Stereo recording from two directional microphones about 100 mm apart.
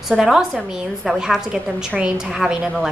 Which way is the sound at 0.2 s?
5° right (ahead or behind).